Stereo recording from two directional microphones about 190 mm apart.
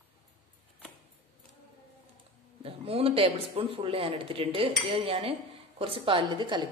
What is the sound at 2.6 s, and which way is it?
Speech, 30° right (ahead or behind).